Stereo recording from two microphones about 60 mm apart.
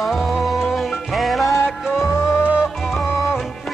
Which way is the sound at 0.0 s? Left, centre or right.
Centre.